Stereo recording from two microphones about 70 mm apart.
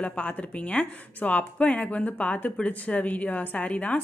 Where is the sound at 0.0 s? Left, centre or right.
Left.